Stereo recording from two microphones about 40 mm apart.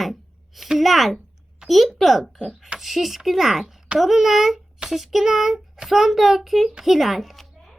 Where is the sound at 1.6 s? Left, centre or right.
Centre.